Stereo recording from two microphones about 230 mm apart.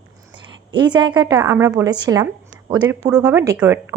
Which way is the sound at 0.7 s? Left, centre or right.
Centre.